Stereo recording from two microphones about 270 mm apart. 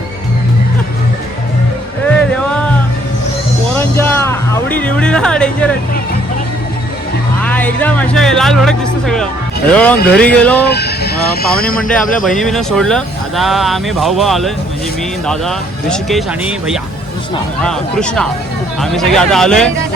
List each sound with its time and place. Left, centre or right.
2.1 s music: centre
3.8 s a sound: centre
7.4 s speech: centre
10.7 s vehicle: left
11.8 s speech: centre
17.6 s speech: centre